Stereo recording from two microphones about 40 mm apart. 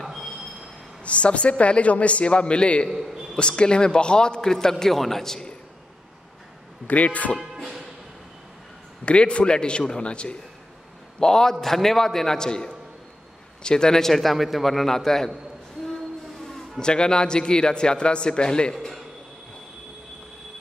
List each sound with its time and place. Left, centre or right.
0.0 s train: centre
1.0 s a man's voice: left
2.9 s a man's voice: centre
3.3 s a man's voice: left
6.9 s a man's voice: left
9.0 s a man's voice: left; by 15.3 s centre
16.4 s speech: centre
18.7 s a man's voice: centre